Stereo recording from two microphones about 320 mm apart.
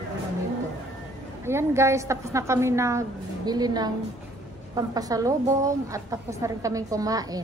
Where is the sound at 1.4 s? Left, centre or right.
Centre.